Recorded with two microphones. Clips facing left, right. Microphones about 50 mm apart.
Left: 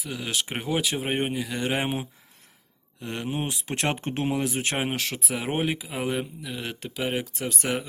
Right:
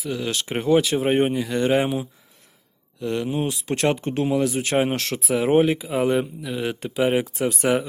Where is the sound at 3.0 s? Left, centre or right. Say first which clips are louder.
Right 6 dB; left.